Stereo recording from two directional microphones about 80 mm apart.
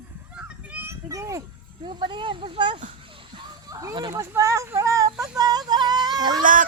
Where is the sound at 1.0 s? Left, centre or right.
Right.